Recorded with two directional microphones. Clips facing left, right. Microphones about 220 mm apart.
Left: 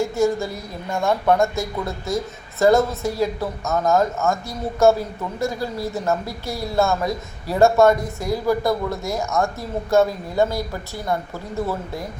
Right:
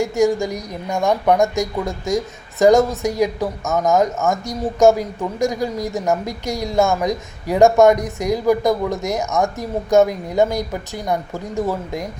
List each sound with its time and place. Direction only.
0.0 s speech: 15° right (ahead or behind)